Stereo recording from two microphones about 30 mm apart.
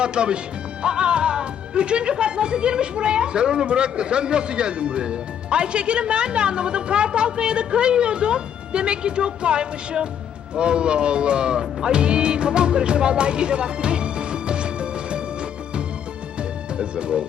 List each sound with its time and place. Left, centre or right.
0.0 s speech: right
16.4 s music: right